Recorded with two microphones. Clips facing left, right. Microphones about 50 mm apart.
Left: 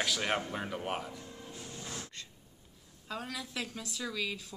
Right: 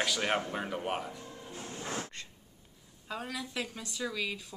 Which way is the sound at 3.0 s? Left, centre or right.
Centre.